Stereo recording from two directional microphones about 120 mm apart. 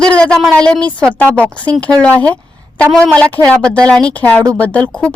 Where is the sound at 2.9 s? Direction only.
5° left (ahead or behind).